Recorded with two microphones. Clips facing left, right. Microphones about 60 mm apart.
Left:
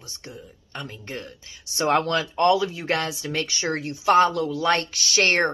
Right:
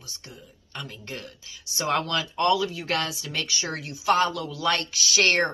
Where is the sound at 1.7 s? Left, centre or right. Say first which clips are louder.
Left 4 dB; left.